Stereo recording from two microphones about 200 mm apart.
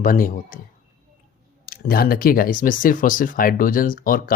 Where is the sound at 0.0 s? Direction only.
45° left (ahead or behind).